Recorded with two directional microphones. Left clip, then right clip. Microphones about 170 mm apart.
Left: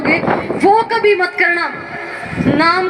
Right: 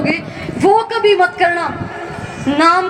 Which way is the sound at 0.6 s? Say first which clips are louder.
Even; 35° right (ahead or behind).